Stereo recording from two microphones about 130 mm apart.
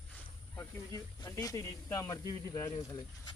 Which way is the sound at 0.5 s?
25° left (ahead or behind).